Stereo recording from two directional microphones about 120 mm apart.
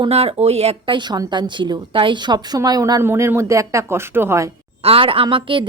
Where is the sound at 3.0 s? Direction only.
20° right (ahead or behind).